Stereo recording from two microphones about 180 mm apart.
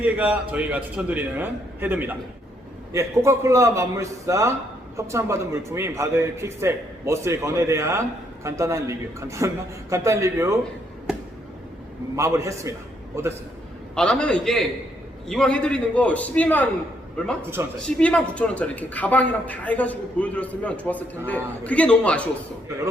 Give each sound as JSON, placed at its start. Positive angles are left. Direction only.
{"t": 0.0, "sound": "a man's voice", "side_deg": -10}
{"t": 12.1, "sound": "a man's voice", "side_deg": -15}
{"t": 13.9, "sound": "a man's voice", "side_deg": 5}
{"t": 17.8, "sound": "a woman's voice", "side_deg": 5}